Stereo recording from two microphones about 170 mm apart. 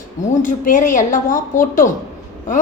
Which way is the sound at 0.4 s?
50° left (ahead or behind).